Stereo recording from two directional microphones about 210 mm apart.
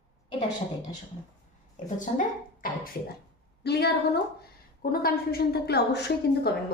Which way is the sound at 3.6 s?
50° left (ahead or behind).